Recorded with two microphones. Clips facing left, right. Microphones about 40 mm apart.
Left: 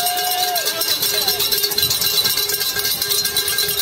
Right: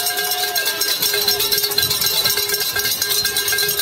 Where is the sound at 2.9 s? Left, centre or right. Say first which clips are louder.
Right 1 dB; centre.